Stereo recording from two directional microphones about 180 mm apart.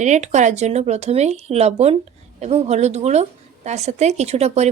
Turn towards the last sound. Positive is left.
turn(degrees=-35)  # may be behind; listen again after turning